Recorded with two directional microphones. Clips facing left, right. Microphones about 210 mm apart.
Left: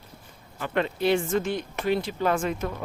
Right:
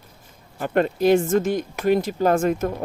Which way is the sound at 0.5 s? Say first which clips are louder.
Right 6 dB; 45° right (ahead or behind).